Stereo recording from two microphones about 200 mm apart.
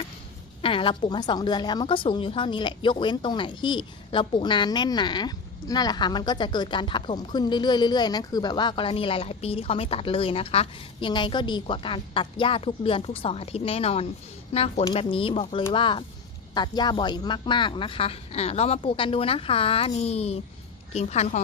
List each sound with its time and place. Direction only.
0.6 s a woman's voice: 25° left (ahead or behind)